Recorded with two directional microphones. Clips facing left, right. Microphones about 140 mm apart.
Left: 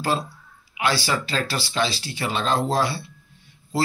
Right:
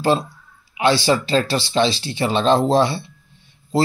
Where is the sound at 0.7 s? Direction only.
25° right (ahead or behind).